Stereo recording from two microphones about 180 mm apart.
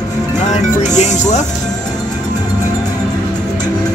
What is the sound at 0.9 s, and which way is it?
Speech, 40° left (ahead or behind).